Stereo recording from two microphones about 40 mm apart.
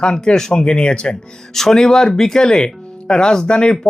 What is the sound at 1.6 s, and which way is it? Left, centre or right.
Speech, centre.